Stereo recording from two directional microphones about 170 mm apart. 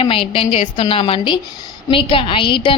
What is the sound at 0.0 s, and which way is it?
A woman's voice, 30° left (ahead or behind).